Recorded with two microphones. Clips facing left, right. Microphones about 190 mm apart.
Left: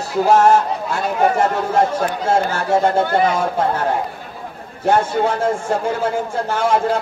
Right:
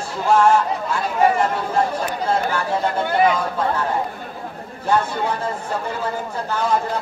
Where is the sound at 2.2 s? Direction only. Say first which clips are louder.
Left 2 dB; 45° left (ahead or behind).